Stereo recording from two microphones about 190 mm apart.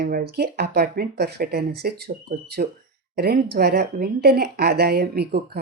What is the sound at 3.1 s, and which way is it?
Speech, 55° right (ahead or behind).